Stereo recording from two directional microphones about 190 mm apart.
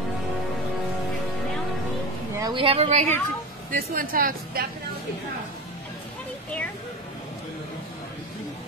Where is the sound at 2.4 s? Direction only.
25° right (ahead or behind).